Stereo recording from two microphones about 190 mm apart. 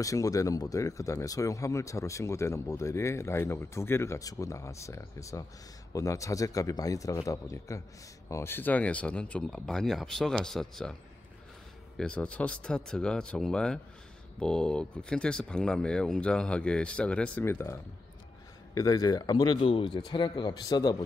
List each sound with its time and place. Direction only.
0.0 s speech: 15° left (ahead or behind)
12.0 s speech: 5° left (ahead or behind)
18.8 s speech: 20° left (ahead or behind)